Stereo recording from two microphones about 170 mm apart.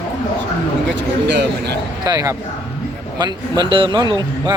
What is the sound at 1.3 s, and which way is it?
Speech, 90° right.